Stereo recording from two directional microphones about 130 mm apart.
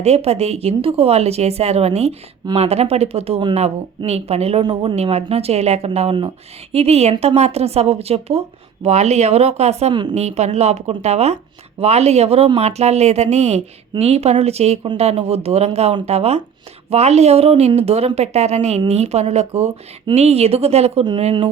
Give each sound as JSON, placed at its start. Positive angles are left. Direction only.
{"t": 0.0, "sound": "speech", "side_deg": -55}
{"t": 4.6, "sound": "a woman's voice", "side_deg": -40}
{"t": 9.9, "sound": "a woman's voice", "side_deg": -35}
{"t": 10.2, "sound": "a woman's voice", "side_deg": -60}